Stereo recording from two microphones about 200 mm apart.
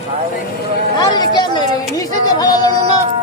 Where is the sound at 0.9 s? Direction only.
20° left (ahead or behind).